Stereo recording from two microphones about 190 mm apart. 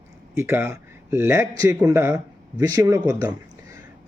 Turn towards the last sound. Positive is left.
turn(degrees=-15)  # may be behind; listen again after turning